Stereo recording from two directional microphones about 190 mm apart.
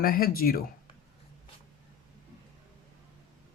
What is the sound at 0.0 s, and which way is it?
Speech, 50° left (ahead or behind).